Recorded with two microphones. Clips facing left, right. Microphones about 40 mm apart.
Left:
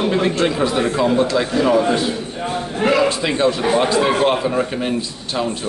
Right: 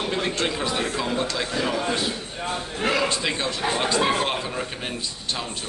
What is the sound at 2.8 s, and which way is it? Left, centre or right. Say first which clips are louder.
A man's voice: left 8 dB; centre.